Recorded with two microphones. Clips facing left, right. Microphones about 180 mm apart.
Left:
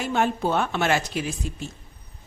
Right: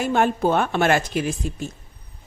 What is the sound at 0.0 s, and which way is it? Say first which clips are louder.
Speech: right 4 dB; 50° right (ahead or behind).